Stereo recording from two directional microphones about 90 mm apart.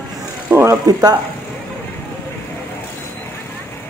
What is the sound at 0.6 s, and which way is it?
Speech, 35° right (ahead or behind).